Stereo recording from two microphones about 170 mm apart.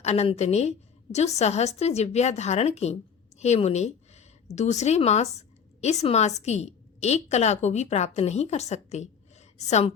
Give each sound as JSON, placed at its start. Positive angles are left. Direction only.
{"t": 0.0, "sound": "a woman's voice", "side_deg": 40}